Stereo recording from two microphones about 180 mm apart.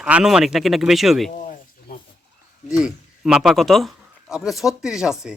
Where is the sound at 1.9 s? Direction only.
55° left (ahead or behind).